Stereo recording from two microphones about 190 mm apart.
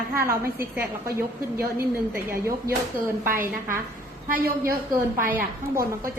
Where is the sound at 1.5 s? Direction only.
15° right (ahead or behind).